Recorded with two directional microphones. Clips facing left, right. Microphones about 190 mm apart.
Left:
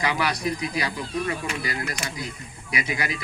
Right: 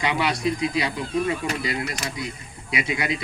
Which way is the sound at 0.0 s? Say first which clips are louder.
Right 2 dB; 25° right (ahead or behind).